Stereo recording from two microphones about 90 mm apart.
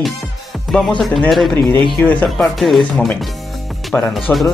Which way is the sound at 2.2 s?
Centre (ahead or behind).